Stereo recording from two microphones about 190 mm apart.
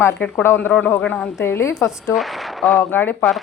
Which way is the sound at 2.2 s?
Centre (ahead or behind).